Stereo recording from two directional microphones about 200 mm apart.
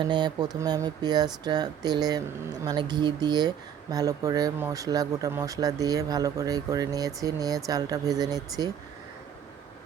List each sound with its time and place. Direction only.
0.0 s speech: 20° right (ahead or behind)